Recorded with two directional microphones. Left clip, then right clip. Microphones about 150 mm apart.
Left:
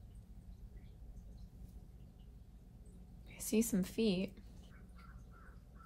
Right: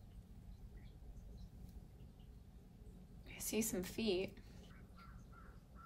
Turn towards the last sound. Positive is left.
turn(degrees=-50)  # may be behind; listen again after turning